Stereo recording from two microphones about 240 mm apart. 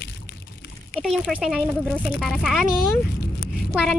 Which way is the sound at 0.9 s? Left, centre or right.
Centre.